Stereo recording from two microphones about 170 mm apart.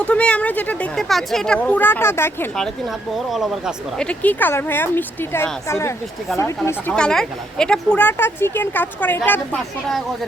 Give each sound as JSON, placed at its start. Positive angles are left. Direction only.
{"t": 0.0, "sound": "a woman's voice", "side_deg": 5}
{"t": 2.6, "sound": "a woman's voice", "side_deg": 0}